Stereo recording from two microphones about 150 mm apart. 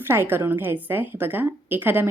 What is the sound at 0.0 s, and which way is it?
A woman's voice, 15° right (ahead or behind).